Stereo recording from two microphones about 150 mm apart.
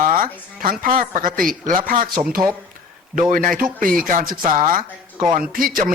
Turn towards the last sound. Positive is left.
turn(degrees=-70)  # may be behind; listen again after turning